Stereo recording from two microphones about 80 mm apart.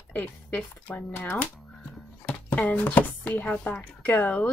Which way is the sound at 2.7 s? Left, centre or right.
Left.